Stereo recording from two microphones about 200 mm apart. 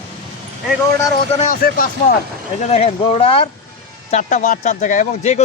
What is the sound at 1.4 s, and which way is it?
Speech, 45° left (ahead or behind).